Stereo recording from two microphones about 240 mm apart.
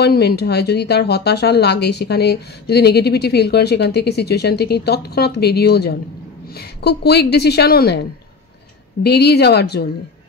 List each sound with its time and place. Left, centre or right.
0.0 s speech: left